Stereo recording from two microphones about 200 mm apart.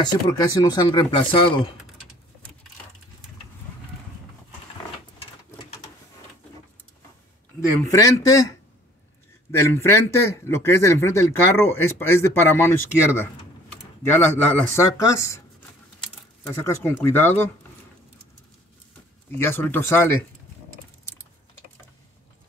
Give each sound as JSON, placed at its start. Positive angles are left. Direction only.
{"t": 0.0, "sound": "speech", "side_deg": 20}
{"t": 7.8, "sound": "speech", "side_deg": 15}
{"t": 16.6, "sound": "speech", "side_deg": 15}
{"t": 19.3, "sound": "speech", "side_deg": 10}